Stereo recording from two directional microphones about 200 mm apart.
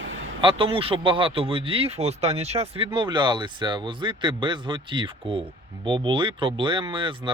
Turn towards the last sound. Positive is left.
turn(degrees=-25)  # may be behind; listen again after turning